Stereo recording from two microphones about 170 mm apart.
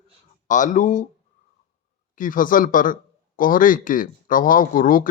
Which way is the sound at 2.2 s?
50° left (ahead or behind).